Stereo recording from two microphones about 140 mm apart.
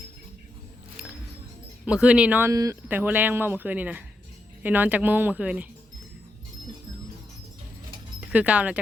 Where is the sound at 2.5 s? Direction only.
25° right (ahead or behind).